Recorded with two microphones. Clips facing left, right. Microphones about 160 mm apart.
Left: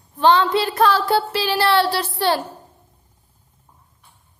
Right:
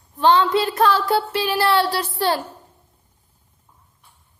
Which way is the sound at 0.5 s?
30° left (ahead or behind).